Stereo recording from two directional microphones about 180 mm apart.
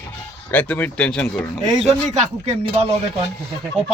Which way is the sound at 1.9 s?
35° right (ahead or behind).